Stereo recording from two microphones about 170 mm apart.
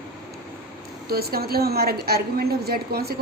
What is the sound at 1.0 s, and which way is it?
A woman's voice, 65° right (ahead or behind).